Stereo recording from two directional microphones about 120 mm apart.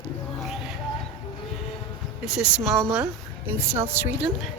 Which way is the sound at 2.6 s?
5° left (ahead or behind).